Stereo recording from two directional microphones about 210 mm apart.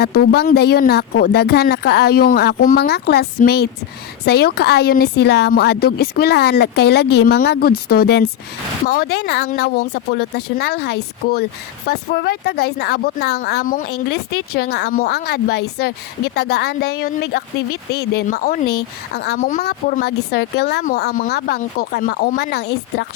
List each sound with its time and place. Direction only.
0.0 s speech: 50° left (ahead or behind)